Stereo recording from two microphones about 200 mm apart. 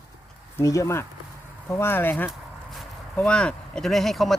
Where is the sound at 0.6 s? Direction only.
15° left (ahead or behind).